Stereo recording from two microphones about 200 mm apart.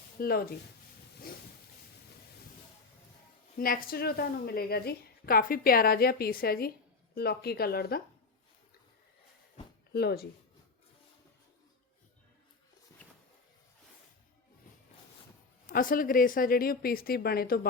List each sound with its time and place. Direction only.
0.2 s a woman's voice: 50° left (ahead or behind)
3.6 s a woman's voice: 45° left (ahead or behind)
9.9 s a woman's voice: 55° left (ahead or behind)
15.7 s a woman's voice: 45° left (ahead or behind)